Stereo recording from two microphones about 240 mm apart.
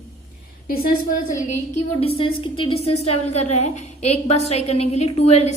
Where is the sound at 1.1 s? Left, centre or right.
Left.